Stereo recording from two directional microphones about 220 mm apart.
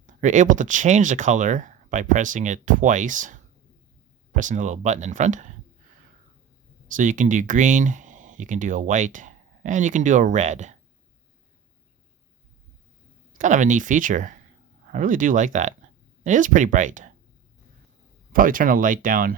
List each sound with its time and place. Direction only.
0.1 s speech: 35° right (ahead or behind)
6.9 s speech: 35° right (ahead or behind)
13.4 s speech: 35° right (ahead or behind)
18.3 s speech: 40° right (ahead or behind)